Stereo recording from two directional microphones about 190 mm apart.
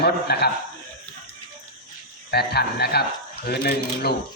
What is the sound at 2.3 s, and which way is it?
A man's voice, 60° left (ahead or behind).